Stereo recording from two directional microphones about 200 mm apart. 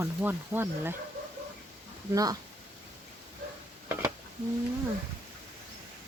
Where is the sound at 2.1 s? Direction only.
20° right (ahead or behind).